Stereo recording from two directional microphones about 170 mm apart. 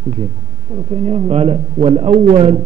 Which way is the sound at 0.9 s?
35° right (ahead or behind).